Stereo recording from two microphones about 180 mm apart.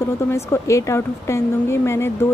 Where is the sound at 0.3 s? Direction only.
15° left (ahead or behind).